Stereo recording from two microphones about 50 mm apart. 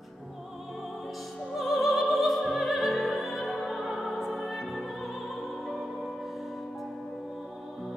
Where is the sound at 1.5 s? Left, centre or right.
Centre.